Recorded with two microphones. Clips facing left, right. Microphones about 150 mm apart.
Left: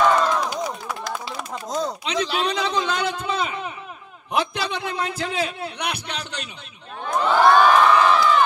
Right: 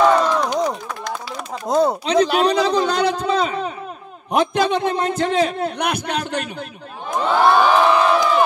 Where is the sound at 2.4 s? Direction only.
35° right (ahead or behind).